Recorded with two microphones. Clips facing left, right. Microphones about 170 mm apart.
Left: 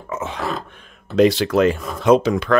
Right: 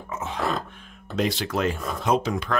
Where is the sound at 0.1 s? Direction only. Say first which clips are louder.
Left 5 dB; 80° left.